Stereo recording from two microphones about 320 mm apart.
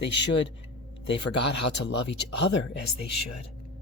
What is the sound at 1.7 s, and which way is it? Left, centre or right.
Speech, left.